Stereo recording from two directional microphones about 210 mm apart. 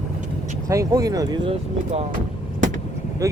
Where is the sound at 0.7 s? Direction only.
15° right (ahead or behind).